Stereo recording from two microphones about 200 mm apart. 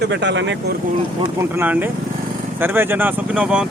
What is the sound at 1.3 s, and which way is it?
Speech, 10° right (ahead or behind).